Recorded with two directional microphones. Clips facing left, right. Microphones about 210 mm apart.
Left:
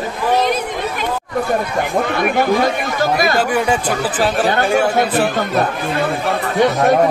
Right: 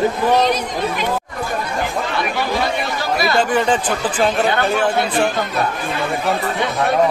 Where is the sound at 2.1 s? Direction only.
50° left (ahead or behind).